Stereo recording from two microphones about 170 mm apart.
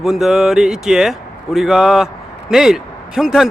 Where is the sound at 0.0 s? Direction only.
Centre (ahead or behind).